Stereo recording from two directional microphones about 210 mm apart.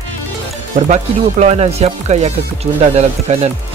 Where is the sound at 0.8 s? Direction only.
35° right (ahead or behind).